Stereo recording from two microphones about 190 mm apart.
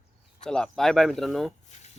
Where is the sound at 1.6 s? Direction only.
35° left (ahead or behind).